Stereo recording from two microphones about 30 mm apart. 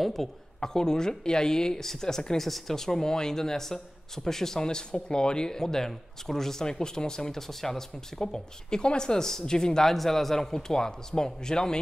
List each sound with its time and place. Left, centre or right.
0.0 s speech: centre
0.6 s speech: left
9.9 s speech: centre; by 11.8 s left